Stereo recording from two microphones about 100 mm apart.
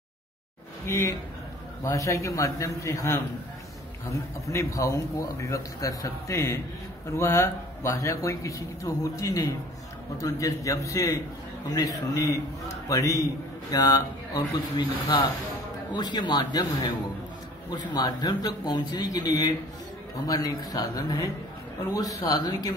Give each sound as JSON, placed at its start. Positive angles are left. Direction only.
{"t": 0.8, "sound": "a man's voice", "side_deg": 30}